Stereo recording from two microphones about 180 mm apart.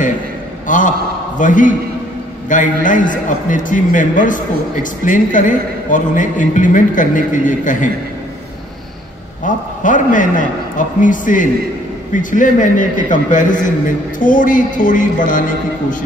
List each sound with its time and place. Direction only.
0.7 s a man's voice: 45° left (ahead or behind)
9.4 s a man's voice: 45° left (ahead or behind)